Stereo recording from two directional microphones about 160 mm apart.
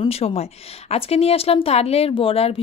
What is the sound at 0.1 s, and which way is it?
A woman's voice, 40° left (ahead or behind).